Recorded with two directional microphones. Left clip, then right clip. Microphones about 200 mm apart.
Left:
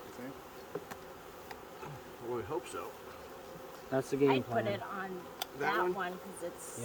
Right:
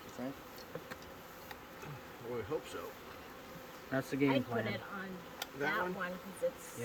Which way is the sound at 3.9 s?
40° left (ahead or behind).